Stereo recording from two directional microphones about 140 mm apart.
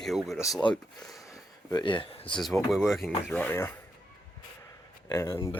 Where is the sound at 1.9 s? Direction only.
35° left (ahead or behind).